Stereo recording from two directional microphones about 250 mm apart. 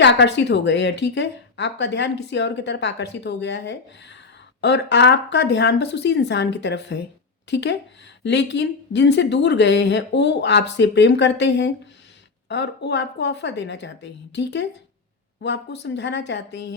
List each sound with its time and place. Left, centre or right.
0.0 s speech: left